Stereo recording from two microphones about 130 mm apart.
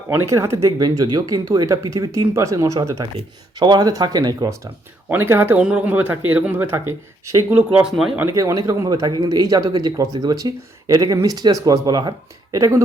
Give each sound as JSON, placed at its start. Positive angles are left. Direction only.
{"t": 0.1, "sound": "speech", "side_deg": -20}
{"t": 3.2, "sound": "speech", "side_deg": -35}
{"t": 7.9, "sound": "speech", "side_deg": -5}
{"t": 8.2, "sound": "speech", "side_deg": -20}